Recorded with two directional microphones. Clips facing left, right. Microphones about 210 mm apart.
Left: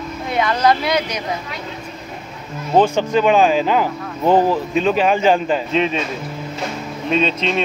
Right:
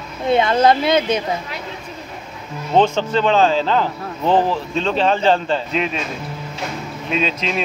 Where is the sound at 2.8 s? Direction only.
10° left (ahead or behind).